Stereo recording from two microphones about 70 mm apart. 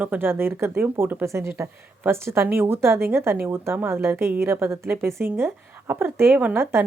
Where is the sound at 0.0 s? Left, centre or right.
Right.